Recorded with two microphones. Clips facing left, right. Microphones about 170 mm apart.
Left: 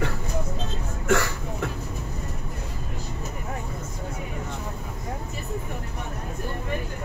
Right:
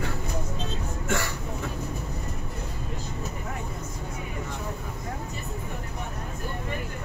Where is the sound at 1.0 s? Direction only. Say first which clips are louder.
Left 7 dB; 70° left (ahead or behind).